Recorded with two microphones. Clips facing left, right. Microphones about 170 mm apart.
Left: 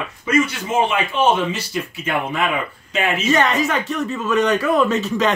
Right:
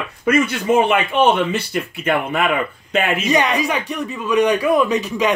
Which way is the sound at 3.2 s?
15° right (ahead or behind).